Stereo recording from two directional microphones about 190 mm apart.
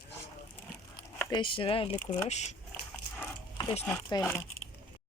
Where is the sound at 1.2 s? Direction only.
20° left (ahead or behind).